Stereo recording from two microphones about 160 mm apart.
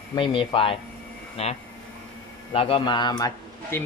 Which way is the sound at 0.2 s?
35° left (ahead or behind).